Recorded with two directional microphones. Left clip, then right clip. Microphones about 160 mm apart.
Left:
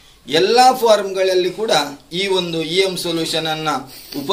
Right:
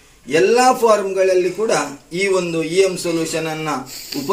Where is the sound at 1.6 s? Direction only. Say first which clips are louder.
Left 1 dB; 20° left (ahead or behind).